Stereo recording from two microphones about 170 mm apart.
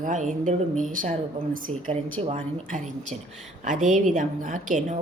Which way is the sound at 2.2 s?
45° right (ahead or behind).